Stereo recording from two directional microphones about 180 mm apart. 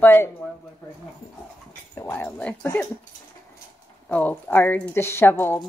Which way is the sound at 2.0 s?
15° left (ahead or behind).